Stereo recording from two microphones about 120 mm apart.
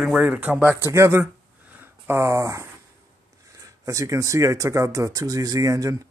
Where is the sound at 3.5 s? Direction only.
25° right (ahead or behind).